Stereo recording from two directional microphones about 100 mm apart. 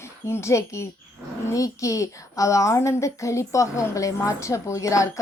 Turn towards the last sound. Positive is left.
turn(degrees=35)  # may be behind; listen again after turning